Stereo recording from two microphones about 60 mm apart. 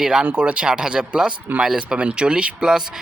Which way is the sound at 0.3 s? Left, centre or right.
Right.